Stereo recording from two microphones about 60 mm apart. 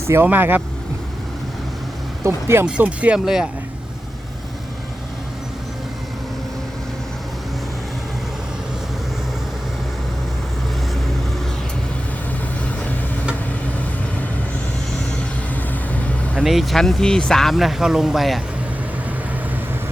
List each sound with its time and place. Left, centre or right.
0.3 s speech: right
2.2 s speech: right
2.6 s speech: right
3.2 s speech: centre
15.9 s vehicle: left
16.4 s speech: centre